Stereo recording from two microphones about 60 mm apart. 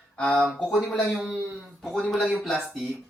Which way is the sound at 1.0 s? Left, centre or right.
Centre.